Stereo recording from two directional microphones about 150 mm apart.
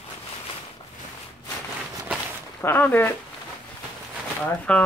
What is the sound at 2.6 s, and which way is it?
Speech, 15° left (ahead or behind).